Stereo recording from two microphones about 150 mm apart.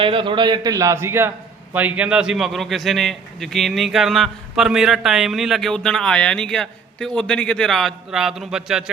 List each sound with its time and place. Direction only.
0.0 s a man's voice: 35° right (ahead or behind); by 8.8 s 5° right (ahead or behind)